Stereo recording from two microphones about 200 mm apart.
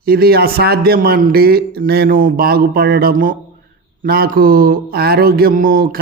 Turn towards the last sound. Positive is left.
turn(degrees=-45)  # may be behind; listen again after turning